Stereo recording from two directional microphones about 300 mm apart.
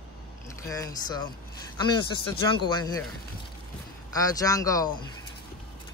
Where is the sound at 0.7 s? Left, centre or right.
Centre.